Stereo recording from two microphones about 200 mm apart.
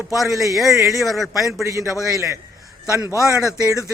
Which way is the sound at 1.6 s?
15° right (ahead or behind).